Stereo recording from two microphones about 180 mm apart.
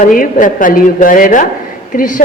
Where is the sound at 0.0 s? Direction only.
50° left (ahead or behind).